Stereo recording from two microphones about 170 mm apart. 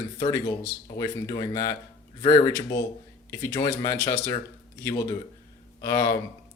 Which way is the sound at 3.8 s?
20° left (ahead or behind).